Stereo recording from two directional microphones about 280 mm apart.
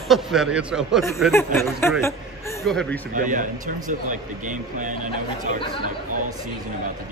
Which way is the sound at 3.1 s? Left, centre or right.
Right.